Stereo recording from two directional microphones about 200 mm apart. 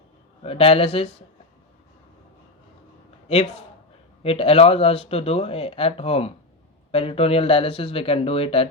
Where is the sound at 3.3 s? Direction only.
30° left (ahead or behind).